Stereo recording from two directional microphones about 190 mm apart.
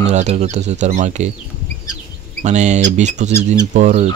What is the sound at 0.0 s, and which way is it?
Speech, 35° right (ahead or behind).